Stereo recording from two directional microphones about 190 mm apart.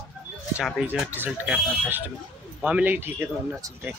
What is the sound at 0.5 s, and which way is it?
Speech, 5° right (ahead or behind).